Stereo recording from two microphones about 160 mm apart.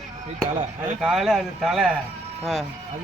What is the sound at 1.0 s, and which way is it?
Speech, 5° right (ahead or behind).